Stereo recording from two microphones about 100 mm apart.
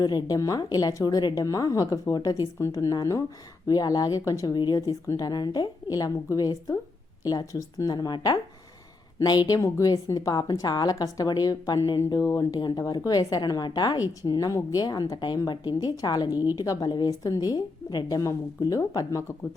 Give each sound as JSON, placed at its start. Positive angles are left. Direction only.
{"t": 0.0, "sound": "speech", "side_deg": 45}
{"t": 12.5, "sound": "speech", "side_deg": 45}
{"t": 16.3, "sound": "a woman's voice", "side_deg": -20}
{"t": 16.6, "sound": "speech", "side_deg": 40}